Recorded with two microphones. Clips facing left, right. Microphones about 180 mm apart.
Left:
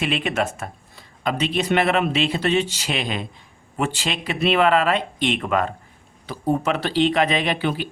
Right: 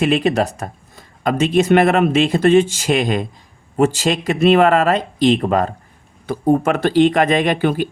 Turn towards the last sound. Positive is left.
turn(degrees=-50)  # may be behind; listen again after turning